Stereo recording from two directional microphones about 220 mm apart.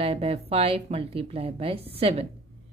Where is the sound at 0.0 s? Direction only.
25° right (ahead or behind).